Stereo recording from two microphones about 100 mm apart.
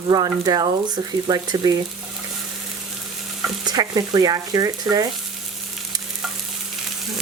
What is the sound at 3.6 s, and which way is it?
Speech, 40° right (ahead or behind).